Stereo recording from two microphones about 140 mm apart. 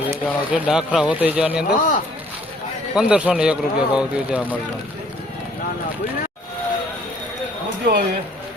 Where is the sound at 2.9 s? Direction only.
5° right (ahead or behind).